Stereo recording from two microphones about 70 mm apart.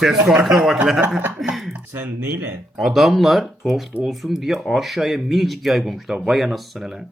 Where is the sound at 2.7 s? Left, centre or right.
Centre.